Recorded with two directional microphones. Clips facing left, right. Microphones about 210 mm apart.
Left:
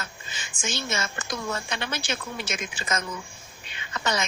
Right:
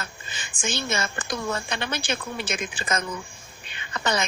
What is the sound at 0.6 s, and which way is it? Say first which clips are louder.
A woman's voice: right 3 dB; 55° right (ahead or behind).